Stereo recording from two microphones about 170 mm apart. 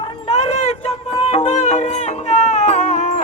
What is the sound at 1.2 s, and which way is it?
Music, 40° left (ahead or behind).